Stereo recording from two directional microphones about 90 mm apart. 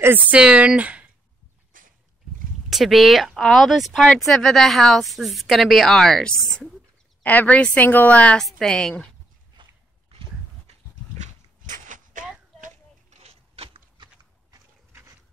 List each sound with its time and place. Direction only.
0.0 s speech: 20° right (ahead or behind)
0.4 s speech: 10° right (ahead or behind)
2.7 s a woman's voice: centre (ahead or behind)
7.2 s a woman's voice: 15° left (ahead or behind)
8.4 s a woman's voice: 5° left (ahead or behind)
13.6 s a sound: 90° right